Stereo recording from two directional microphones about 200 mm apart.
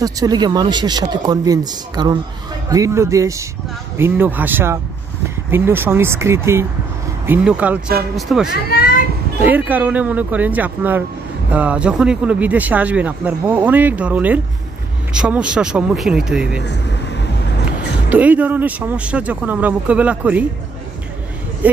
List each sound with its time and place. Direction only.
0.0 s speech: 20° right (ahead or behind); by 8.5 s centre (ahead or behind)
8.6 s a sound: 45° left (ahead or behind)
9.4 s speech: 10° right (ahead or behind)
16.6 s vehicle: 60° left (ahead or behind)
18.1 s speech: 5° right (ahead or behind)